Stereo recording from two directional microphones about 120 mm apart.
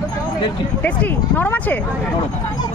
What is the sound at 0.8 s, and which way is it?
Speech, 10° left (ahead or behind).